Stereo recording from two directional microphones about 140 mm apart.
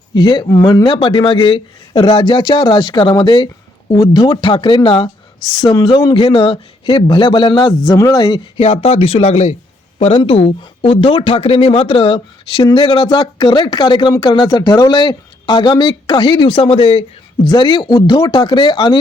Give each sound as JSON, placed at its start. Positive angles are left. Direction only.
{"t": 0.1, "sound": "speech", "side_deg": 35}
{"t": 8.5, "sound": "speech", "side_deg": 45}
{"t": 10.0, "sound": "speech", "side_deg": 45}
{"t": 12.6, "sound": "speech", "side_deg": 35}